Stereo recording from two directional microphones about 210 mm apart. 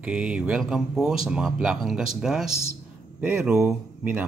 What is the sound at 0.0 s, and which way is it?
Speech, 5° right (ahead or behind).